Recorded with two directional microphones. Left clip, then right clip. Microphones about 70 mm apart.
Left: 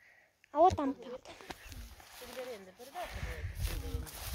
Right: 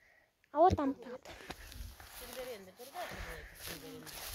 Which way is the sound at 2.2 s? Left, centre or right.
Right.